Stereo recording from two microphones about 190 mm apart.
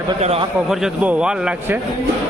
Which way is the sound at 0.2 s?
30° right (ahead or behind).